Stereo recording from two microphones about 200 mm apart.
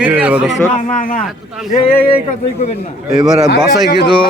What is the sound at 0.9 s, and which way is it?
Speech, 45° left (ahead or behind).